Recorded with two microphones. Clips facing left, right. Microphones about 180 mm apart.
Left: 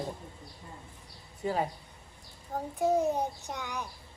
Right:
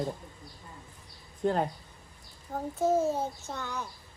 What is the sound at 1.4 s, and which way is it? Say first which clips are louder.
Speech: right 3 dB; 5° left (ahead or behind).